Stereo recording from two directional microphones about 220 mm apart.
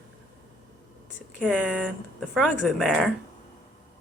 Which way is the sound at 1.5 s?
5° right (ahead or behind).